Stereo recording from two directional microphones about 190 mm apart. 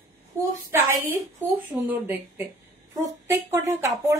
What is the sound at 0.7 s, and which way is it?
Speech, 10° right (ahead or behind).